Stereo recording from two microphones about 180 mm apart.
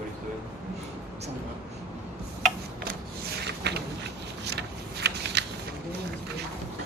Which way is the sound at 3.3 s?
65° right (ahead or behind).